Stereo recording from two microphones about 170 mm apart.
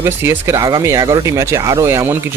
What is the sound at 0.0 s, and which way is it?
Speech, 15° right (ahead or behind).